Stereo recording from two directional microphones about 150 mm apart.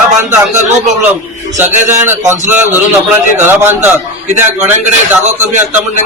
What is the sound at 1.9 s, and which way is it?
A man's voice, 15° right (ahead or behind).